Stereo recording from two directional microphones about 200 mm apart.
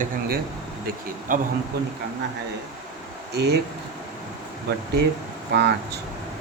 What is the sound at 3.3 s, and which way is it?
Speech, 55° right (ahead or behind).